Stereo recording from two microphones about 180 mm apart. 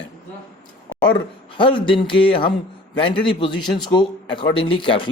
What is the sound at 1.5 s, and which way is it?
Speech, 30° left (ahead or behind).